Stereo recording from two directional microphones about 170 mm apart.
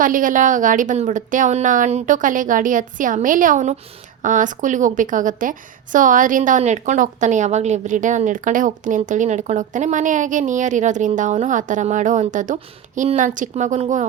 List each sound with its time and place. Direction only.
0.0 s a woman's voice: 50° right (ahead or behind)